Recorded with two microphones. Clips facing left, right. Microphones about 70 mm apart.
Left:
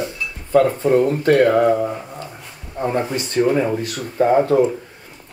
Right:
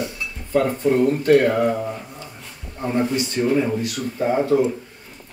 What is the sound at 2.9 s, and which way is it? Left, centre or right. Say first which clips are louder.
Speech: right 2 dB; left.